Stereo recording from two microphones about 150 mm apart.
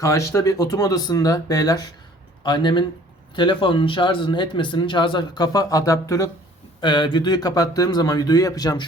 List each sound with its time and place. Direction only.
0.0 s speech: 20° left (ahead or behind)